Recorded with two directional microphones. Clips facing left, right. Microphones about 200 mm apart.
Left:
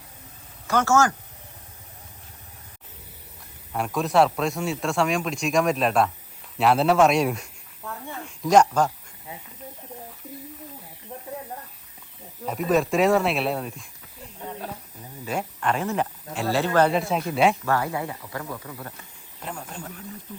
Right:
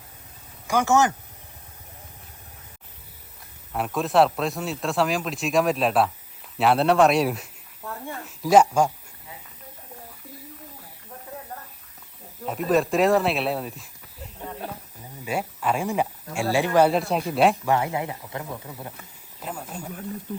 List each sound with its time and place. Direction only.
0.7 s speech: 15° right (ahead or behind)
3.7 s speech: centre (ahead or behind)
12.5 s speech: centre (ahead or behind)
15.2 s speech: 10° right (ahead or behind)
16.9 s speech: centre (ahead or behind)
17.7 s speech: 20° right (ahead or behind)
19.4 s snake: 5° right (ahead or behind)